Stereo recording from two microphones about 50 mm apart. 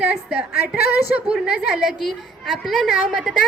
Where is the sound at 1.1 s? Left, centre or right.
Centre.